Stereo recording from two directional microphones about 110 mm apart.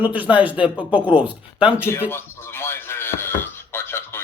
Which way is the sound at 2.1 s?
20° left (ahead or behind).